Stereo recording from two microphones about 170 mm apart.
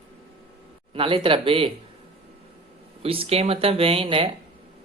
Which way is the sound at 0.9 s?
30° right (ahead or behind).